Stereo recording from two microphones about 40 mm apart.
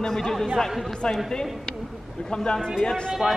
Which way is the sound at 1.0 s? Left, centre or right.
Centre.